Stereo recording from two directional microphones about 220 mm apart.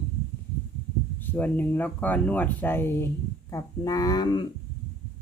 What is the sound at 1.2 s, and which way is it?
Speech, 10° left (ahead or behind).